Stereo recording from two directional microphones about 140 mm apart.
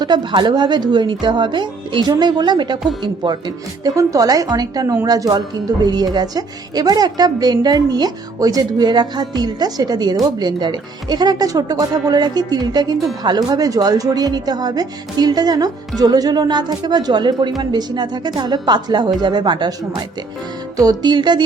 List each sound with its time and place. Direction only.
0.0 s a woman's voice: 30° right (ahead or behind)